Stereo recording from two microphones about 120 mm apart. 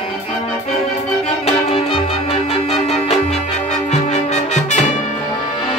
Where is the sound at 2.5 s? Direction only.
60° left (ahead or behind).